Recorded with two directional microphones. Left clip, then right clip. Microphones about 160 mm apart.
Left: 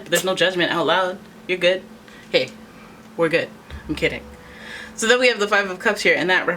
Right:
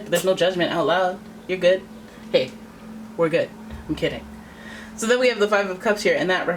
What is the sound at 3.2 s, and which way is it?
Speech, 30° left (ahead or behind).